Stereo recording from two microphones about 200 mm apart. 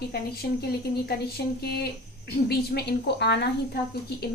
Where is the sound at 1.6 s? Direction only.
50° left (ahead or behind).